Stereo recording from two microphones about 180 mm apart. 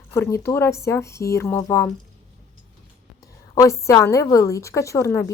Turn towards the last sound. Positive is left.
turn(degrees=15)  # may be behind; listen again after turning